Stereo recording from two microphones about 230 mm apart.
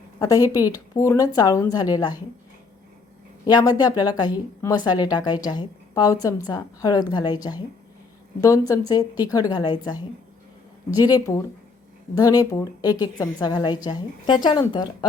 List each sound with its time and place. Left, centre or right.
0.2 s a woman's voice: centre
3.4 s a woman's voice: centre